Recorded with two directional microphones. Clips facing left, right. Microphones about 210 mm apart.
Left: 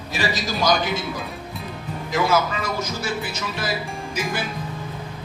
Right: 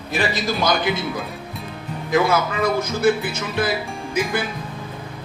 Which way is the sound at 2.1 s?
55° right (ahead or behind).